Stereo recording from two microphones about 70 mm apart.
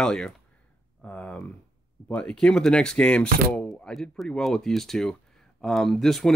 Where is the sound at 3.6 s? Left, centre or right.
Centre.